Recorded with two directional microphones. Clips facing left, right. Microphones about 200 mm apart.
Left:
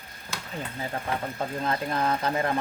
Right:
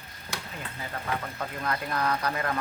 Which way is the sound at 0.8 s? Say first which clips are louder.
Left 2 dB; 30° left (ahead or behind).